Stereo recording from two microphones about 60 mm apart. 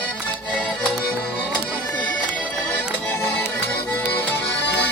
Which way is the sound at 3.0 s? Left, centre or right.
Left.